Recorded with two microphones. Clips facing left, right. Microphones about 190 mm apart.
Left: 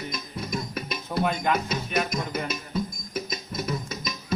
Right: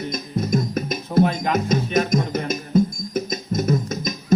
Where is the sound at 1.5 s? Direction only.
45° right (ahead or behind).